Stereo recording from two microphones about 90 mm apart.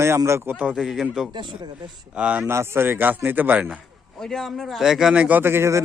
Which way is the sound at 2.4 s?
25° right (ahead or behind).